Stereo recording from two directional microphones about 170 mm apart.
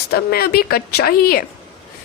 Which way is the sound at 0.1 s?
65° left (ahead or behind).